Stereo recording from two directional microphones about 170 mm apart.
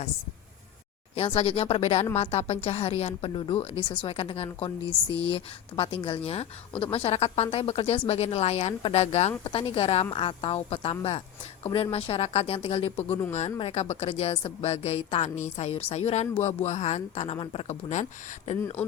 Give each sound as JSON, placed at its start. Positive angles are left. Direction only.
{"t": 1.1, "sound": "speech", "side_deg": 35}
{"t": 18.8, "sound": "speech", "side_deg": 10}